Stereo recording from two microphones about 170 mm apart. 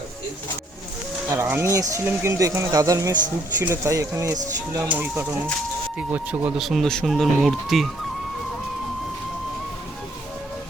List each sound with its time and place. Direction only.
1.3 s speech: 15° right (ahead or behind)